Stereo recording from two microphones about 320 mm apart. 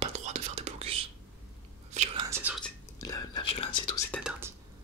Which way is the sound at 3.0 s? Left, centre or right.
Centre.